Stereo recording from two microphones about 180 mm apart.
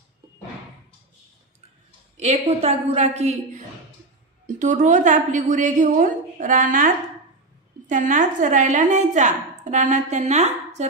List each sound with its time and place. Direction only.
2.1 s a woman's voice: 35° right (ahead or behind)
7.9 s a woman's voice: 45° right (ahead or behind)